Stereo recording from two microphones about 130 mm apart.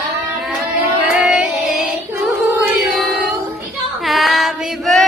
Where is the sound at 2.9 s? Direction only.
Centre (ahead or behind).